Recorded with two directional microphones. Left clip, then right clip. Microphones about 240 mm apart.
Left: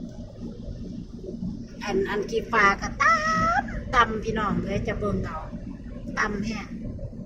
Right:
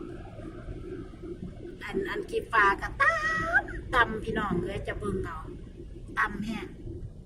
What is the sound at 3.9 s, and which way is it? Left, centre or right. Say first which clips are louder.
Speech: left 4 dB; centre.